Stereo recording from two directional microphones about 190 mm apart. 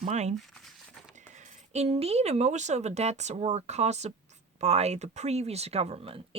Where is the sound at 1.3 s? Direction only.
40° right (ahead or behind).